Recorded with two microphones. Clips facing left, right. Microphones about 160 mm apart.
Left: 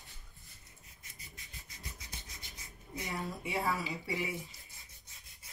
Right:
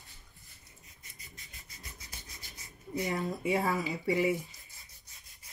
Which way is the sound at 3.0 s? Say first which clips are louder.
Right 7 dB; 45° right (ahead or behind).